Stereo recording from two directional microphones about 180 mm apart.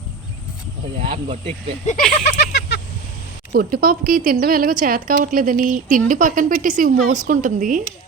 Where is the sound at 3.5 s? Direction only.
55° right (ahead or behind).